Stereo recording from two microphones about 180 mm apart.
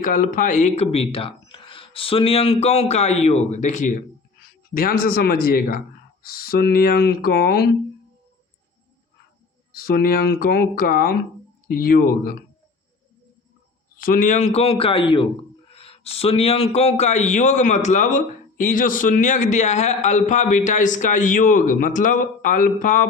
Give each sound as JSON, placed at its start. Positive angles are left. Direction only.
{"t": 0.0, "sound": "a man's voice", "side_deg": 50}
{"t": 9.7, "sound": "speech", "side_deg": 55}
{"t": 14.0, "sound": "a man's voice", "side_deg": 50}